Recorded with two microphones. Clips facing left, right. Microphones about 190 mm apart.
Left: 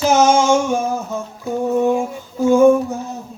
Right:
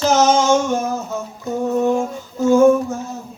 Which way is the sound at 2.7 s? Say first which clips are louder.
Left 1 dB; 15° left (ahead or behind).